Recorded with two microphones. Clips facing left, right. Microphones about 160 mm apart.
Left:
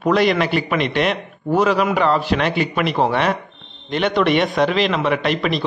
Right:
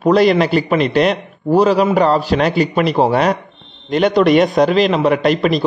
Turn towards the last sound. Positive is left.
turn(degrees=-40)  # may be behind; listen again after turning